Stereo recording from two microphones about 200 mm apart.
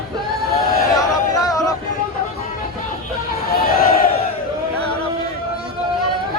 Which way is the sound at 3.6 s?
45° left (ahead or behind).